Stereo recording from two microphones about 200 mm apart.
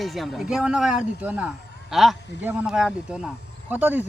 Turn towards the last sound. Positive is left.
turn(degrees=-10)  # may be behind; listen again after turning